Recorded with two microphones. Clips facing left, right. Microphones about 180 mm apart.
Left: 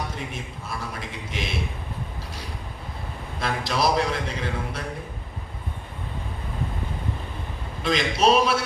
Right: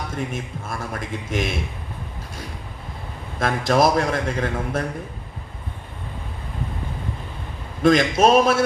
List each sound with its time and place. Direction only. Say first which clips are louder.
0.6 s a man's voice: right 3 dB; 50° right (ahead or behind)
3.4 s a man's voice: right 6 dB; 50° right (ahead or behind)
7.8 s a man's voice: right 7 dB; 50° right (ahead or behind)